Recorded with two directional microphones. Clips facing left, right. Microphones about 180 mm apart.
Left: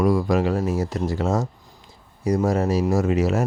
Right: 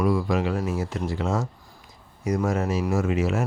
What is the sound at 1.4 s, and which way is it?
Speech, 30° left (ahead or behind).